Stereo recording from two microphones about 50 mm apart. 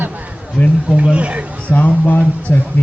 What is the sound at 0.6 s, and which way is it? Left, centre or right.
Speech, left.